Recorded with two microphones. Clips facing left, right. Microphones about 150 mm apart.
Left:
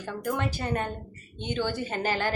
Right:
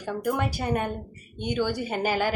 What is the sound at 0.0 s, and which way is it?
A woman's voice, 10° right (ahead or behind).